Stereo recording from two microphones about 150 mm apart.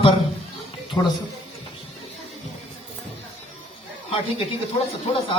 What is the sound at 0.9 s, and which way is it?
Speech, 25° left (ahead or behind).